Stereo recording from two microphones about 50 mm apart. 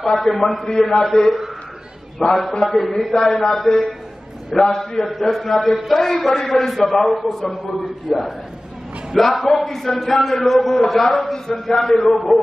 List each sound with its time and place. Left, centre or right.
0.0 s a man's voice: centre
2.2 s a man's voice: centre
2.7 s a man's voice: centre